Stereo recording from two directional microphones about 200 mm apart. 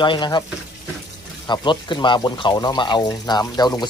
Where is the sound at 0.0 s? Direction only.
25° left (ahead or behind).